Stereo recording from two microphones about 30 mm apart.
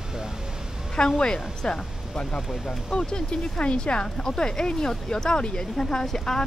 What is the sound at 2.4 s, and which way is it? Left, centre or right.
Speech, centre.